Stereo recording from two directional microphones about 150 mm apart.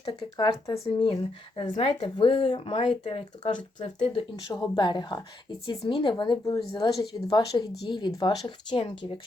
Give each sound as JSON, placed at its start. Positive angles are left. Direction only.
{"t": 0.0, "sound": "speech", "side_deg": 30}